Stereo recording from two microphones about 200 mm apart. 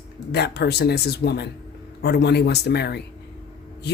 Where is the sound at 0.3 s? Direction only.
55° left (ahead or behind).